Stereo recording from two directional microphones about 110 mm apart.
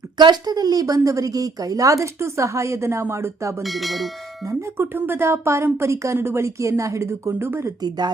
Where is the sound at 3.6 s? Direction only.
Centre (ahead or behind).